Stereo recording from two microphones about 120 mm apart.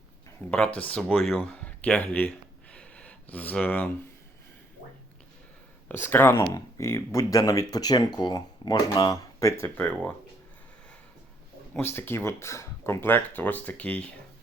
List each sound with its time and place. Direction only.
0.5 s speech: 10° left (ahead or behind)
5.9 s speech: 15° left (ahead or behind)
11.7 s speech: 15° left (ahead or behind)